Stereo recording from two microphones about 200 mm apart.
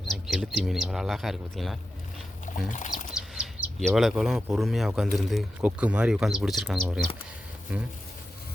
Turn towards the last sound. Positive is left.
turn(degrees=-5)  # may be behind; listen again after turning